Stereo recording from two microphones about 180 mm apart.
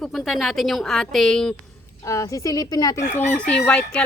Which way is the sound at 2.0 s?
15° left (ahead or behind).